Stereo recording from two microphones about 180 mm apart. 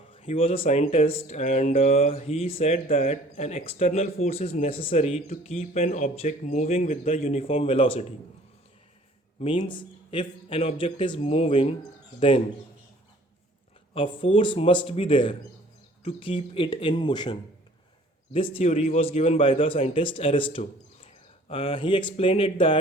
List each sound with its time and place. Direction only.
0.1 s speech: 30° left (ahead or behind)
9.6 s speech: 30° left (ahead or behind)
11.9 s bird: 30° left (ahead or behind)
13.9 s speech: 30° left (ahead or behind)
18.3 s speech: 30° left (ahead or behind)